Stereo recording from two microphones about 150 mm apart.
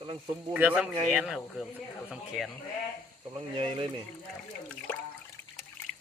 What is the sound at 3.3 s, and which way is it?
Speech, 35° right (ahead or behind).